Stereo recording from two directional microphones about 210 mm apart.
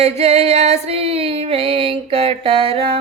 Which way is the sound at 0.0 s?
30° right (ahead or behind).